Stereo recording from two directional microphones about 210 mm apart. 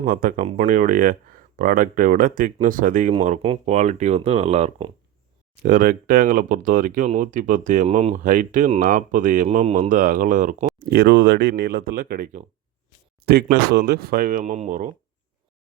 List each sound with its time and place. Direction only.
0.0 s speech: 40° right (ahead or behind)
10.8 s speech: 50° right (ahead or behind); by 14.9 s 35° right (ahead or behind)